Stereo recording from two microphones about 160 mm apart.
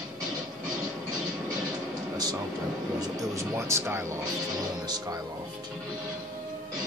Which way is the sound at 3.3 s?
15° right (ahead or behind).